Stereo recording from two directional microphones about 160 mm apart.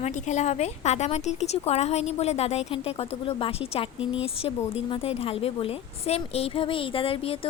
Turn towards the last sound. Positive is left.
turn(degrees=35)  # may be behind; listen again after turning